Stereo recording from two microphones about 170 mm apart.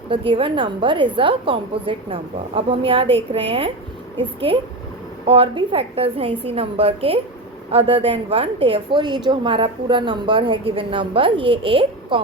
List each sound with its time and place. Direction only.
0.1 s speech: 30° right (ahead or behind)